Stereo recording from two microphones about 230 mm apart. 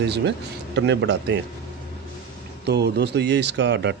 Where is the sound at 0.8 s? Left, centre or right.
Right.